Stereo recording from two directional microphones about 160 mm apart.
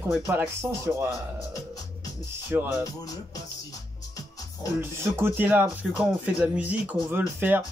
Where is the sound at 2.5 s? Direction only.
15° right (ahead or behind).